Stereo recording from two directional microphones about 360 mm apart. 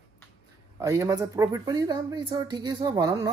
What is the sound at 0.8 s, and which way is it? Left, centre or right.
Speech, centre.